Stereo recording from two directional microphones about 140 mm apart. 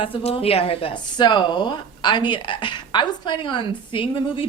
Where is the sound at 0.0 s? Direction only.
40° left (ahead or behind).